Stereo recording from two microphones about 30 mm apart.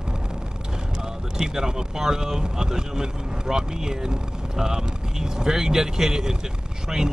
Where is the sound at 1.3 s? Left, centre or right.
Centre.